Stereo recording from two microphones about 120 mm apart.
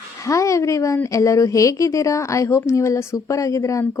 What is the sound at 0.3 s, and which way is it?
A woman's voice, 25° left (ahead or behind).